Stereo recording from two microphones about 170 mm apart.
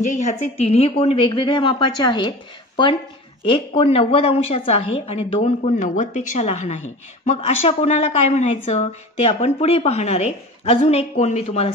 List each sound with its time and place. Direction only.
0.0 s speech: 45° left (ahead or behind)